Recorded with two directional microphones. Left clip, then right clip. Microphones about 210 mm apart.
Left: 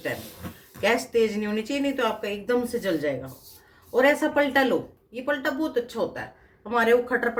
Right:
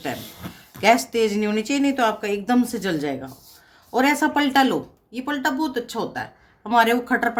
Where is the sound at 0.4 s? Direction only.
20° right (ahead or behind).